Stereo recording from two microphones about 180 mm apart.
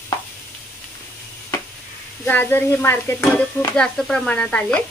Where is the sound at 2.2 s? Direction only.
10° left (ahead or behind).